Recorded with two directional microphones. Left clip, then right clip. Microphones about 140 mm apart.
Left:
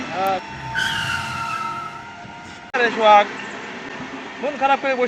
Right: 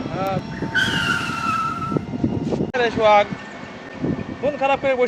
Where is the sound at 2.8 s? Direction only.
45° right (ahead or behind).